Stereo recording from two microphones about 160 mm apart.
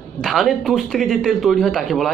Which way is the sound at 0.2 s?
Centre (ahead or behind).